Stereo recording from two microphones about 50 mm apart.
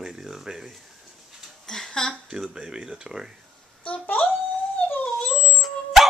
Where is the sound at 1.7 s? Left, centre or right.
Centre.